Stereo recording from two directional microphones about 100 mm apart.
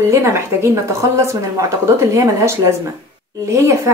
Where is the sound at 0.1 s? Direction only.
25° right (ahead or behind).